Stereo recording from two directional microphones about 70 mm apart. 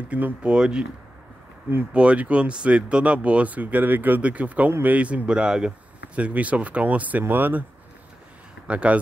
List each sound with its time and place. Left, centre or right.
0.1 s speech: centre
2.0 s speech: centre
8.6 s speech: centre